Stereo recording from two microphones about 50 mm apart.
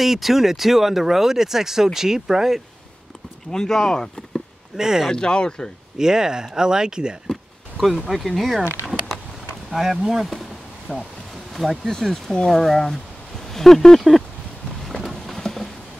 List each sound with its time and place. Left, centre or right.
0.0 s speech: centre
3.5 s speech: centre
4.7 s speech: centre
5.1 s speech: centre
5.9 s speech: centre
8.0 s speech: centre
9.7 s speech: centre
10.9 s speech: centre
11.5 s speech: centre
12.1 s speech: centre
15.0 s clip-clop: centre
15.4 s a sound: centre